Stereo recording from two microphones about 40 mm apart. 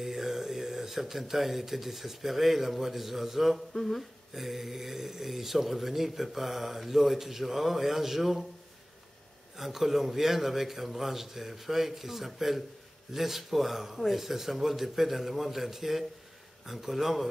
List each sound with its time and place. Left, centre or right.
0.0 s speech: centre
3.7 s humming: centre
4.3 s speech: centre
9.6 s a man's voice: centre